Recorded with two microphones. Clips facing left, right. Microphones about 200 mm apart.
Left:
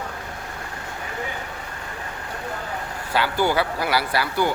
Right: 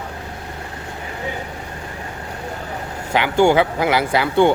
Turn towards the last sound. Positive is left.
turn(degrees=-25)  # may be behind; listen again after turning